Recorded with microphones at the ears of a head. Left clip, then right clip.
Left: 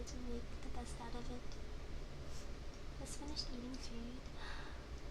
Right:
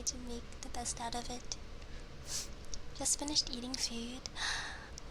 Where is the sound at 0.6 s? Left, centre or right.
Right.